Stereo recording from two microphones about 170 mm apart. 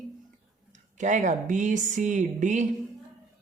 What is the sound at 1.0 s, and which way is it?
A woman's voice, 45° right (ahead or behind).